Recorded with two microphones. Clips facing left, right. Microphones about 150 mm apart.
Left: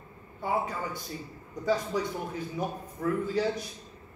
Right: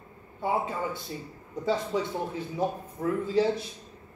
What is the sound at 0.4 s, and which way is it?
A man's voice, 25° right (ahead or behind).